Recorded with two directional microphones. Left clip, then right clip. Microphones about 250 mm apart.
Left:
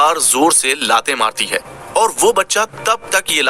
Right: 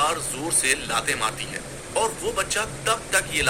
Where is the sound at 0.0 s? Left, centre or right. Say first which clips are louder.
Left 12 dB; left.